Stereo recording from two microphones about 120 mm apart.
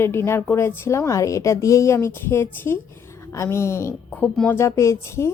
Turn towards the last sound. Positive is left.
turn(degrees=25)  # may be behind; listen again after turning